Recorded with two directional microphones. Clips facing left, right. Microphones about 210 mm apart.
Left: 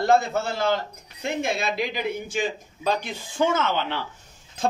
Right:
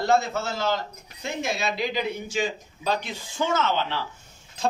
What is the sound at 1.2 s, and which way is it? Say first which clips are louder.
A man's voice: left 2 dB; 55° left (ahead or behind).